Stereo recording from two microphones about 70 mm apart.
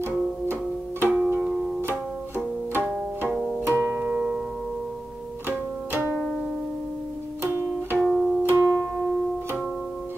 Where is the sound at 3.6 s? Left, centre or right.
Right; by 4.5 s centre.